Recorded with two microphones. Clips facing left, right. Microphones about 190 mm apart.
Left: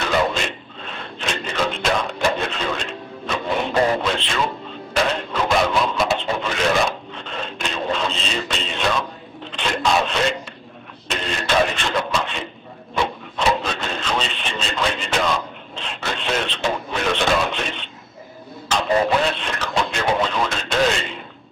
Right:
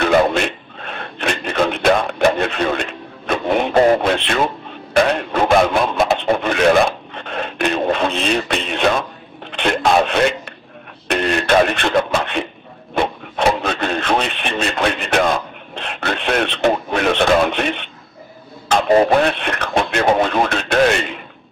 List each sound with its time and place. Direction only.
0.0 s music: 60° right (ahead or behind)
4.9 s radio: 55° right (ahead or behind)
9.5 s a sound: 60° right (ahead or behind)
12.9 s radio: 55° right (ahead or behind)